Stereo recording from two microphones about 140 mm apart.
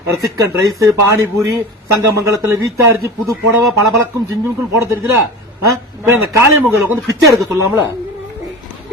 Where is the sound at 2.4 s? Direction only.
20° right (ahead or behind).